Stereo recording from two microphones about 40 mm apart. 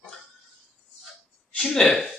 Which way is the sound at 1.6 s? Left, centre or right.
Centre.